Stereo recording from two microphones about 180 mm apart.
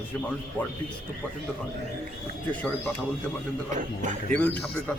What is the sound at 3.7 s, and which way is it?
Speech, 45° right (ahead or behind).